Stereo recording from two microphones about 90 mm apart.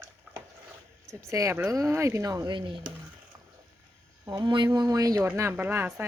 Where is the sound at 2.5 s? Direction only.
65° right (ahead or behind).